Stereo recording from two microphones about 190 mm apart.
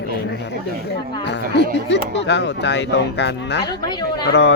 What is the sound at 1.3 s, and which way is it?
Speech, 65° left (ahead or behind).